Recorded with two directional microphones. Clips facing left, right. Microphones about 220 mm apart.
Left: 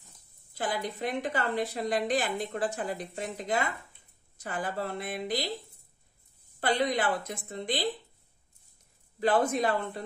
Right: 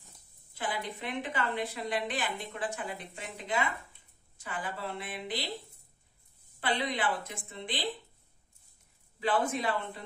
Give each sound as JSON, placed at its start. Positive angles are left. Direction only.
{"t": 0.6, "sound": "a woman's voice", "side_deg": 40}
{"t": 6.6, "sound": "a woman's voice", "side_deg": 40}
{"t": 9.2, "sound": "a woman's voice", "side_deg": 40}